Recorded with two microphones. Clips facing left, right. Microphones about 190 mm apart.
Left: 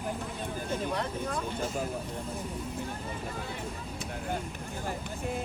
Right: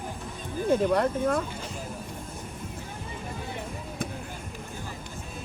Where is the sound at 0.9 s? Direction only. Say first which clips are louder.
Right 8 dB; 55° right (ahead or behind).